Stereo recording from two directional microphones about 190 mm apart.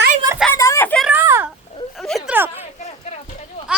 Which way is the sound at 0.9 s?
5° right (ahead or behind).